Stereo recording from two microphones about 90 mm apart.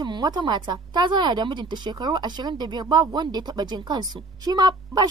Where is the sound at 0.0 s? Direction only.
50° right (ahead or behind).